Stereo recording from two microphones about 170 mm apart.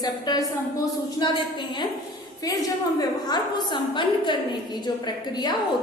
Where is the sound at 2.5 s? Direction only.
20° left (ahead or behind).